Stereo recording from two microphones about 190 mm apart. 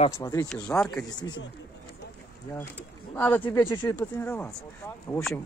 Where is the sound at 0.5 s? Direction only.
5° left (ahead or behind).